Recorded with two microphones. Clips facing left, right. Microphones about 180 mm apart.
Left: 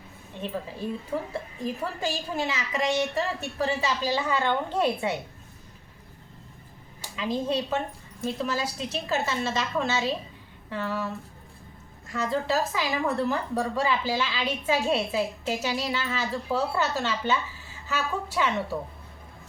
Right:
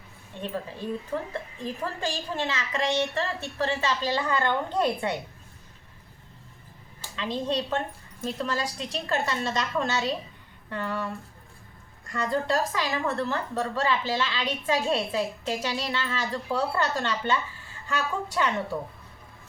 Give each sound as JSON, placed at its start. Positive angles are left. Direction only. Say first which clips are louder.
{"t": 0.4, "sound": "a woman's voice", "louder": "even", "side_deg": 5}
{"t": 7.0, "sound": "a woman's voice", "louder": "left 2 dB", "side_deg": 10}